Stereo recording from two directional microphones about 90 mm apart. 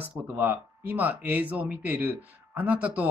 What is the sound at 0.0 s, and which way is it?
Speech, 20° right (ahead or behind).